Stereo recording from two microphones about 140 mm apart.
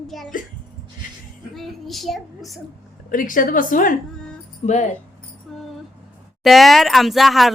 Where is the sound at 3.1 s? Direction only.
75° left (ahead or behind).